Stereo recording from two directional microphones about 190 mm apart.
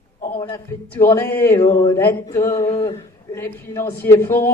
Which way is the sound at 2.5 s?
25° left (ahead or behind).